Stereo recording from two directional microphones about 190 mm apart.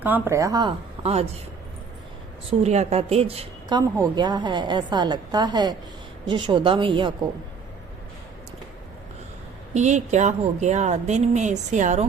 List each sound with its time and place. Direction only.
0.0 s speech: 10° right (ahead or behind)
1.0 s speech: 35° right (ahead or behind)
2.5 s a woman's voice: 35° right (ahead or behind)
9.7 s speech: 35° right (ahead or behind)